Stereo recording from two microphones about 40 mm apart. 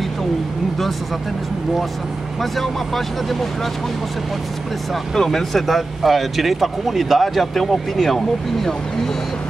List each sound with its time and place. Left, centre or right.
2.5 s speech: centre
5.1 s speech: centre